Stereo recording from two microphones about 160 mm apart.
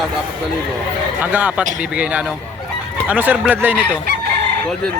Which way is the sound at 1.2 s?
10° right (ahead or behind).